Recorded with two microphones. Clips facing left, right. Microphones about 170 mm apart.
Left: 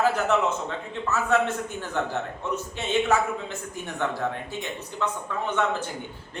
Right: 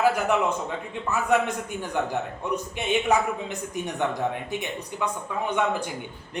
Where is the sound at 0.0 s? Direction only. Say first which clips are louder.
Right 1 dB; 10° right (ahead or behind).